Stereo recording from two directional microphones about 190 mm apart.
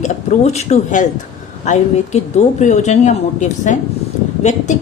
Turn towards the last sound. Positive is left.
turn(degrees=35)  # may be behind; listen again after turning